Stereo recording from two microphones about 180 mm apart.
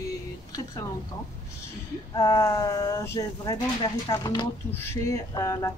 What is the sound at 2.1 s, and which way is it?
Speech, 25° left (ahead or behind).